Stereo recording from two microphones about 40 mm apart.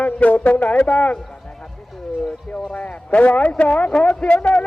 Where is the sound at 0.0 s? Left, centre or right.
Left.